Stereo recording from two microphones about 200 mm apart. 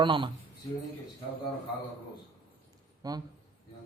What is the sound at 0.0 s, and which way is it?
Speech, 25° right (ahead or behind).